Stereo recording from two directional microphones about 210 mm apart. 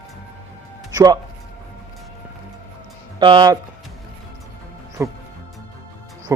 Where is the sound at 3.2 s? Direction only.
20° right (ahead or behind).